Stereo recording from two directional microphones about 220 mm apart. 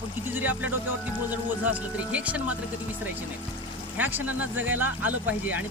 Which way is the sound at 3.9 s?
10° right (ahead or behind).